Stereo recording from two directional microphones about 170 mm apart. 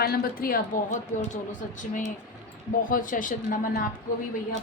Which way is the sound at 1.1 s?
45° left (ahead or behind).